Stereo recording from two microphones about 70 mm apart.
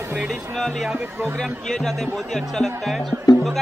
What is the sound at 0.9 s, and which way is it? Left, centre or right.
Speech, right.